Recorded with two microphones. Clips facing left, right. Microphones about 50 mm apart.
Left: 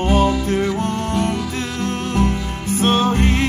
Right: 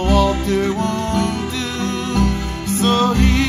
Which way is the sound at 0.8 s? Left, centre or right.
Right.